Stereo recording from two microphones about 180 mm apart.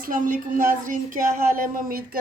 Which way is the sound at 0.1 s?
50° right (ahead or behind).